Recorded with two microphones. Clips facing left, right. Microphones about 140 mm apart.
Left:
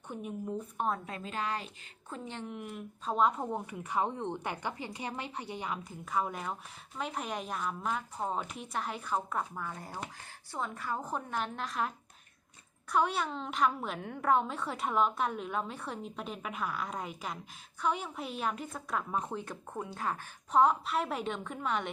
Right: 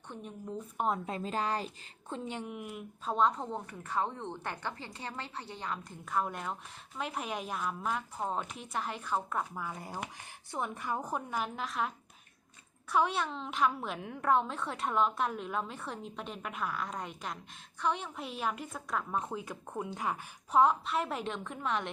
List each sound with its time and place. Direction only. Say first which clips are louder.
0.1 s speech: left 4 dB; 10° left (ahead or behind)
1.0 s a woman's voice: right 3 dB; 30° right (ahead or behind)
2.2 s a woman's voice: even; 10° right (ahead or behind)
19.8 s speech: right 1 dB; 15° right (ahead or behind)
20.5 s a woman's voice: even; centre (ahead or behind)